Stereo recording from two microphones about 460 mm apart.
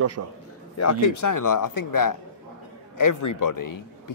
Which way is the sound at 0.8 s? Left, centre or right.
Left.